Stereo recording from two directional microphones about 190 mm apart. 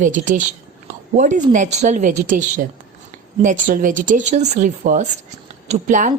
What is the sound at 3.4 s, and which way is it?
Speech, 45° right (ahead or behind).